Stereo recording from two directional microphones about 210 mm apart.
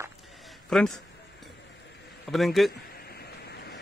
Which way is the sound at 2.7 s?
45° left (ahead or behind).